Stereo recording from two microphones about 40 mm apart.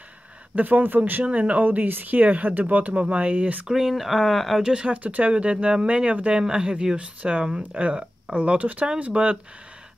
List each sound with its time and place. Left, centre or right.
0.6 s speech: right
1.2 s speech: right
2.1 s speech: right
3.6 s speech: centre
4.6 s speech: right
4.9 s speech: right